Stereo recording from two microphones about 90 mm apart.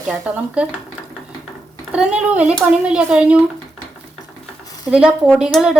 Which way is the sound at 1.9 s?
15° right (ahead or behind).